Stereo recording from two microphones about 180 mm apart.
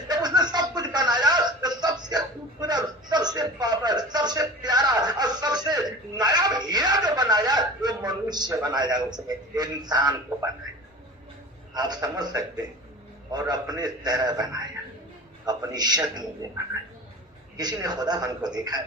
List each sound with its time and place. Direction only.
0.1 s chuckle: 25° right (ahead or behind)
11.7 s a man's voice: 20° right (ahead or behind)
17.6 s a man's voice: 20° right (ahead or behind)